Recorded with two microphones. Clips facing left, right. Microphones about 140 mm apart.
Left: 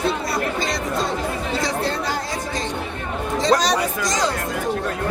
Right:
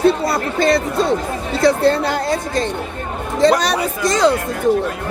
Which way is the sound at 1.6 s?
60° right (ahead or behind).